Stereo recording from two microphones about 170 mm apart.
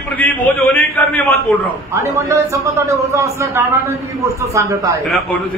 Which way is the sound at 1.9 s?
15° right (ahead or behind).